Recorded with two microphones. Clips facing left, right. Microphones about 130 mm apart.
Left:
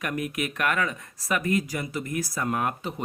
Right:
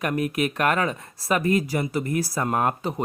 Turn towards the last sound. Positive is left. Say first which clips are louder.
# right 5 dB
turn(degrees=-40)  # may be behind; listen again after turning